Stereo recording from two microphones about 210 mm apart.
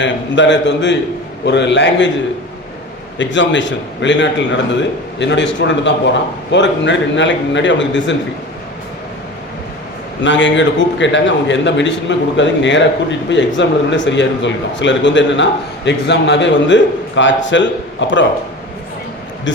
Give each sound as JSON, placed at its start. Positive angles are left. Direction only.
{"t": 0.0, "sound": "a man's voice", "side_deg": 60}
{"t": 3.2, "sound": "a man's voice", "side_deg": 60}
{"t": 10.2, "sound": "a man's voice", "side_deg": 60}
{"t": 19.5, "sound": "a man's voice", "side_deg": 60}